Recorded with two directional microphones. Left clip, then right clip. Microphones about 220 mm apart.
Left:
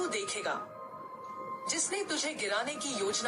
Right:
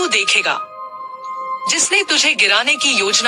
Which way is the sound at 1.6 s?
40° right (ahead or behind).